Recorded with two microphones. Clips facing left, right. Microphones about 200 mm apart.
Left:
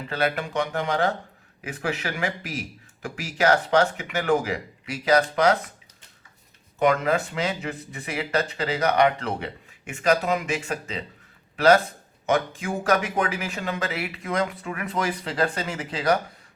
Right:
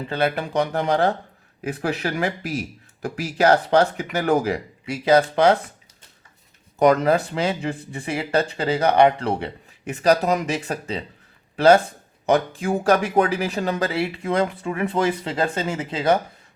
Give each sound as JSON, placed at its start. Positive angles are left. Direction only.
{"t": 0.1, "sound": "speech", "side_deg": -30}
{"t": 6.7, "sound": "speech", "side_deg": -40}